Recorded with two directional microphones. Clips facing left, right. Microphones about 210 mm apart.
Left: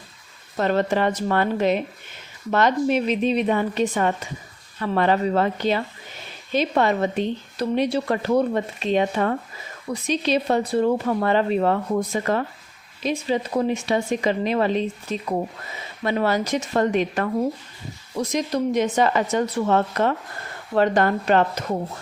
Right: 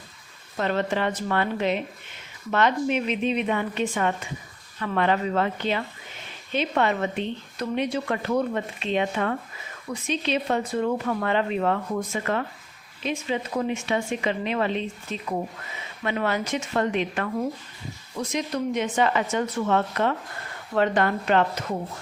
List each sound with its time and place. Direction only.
0.5 s speech: 40° left (ahead or behind)